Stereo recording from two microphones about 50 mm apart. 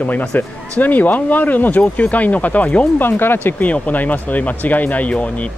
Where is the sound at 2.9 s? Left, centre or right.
Left.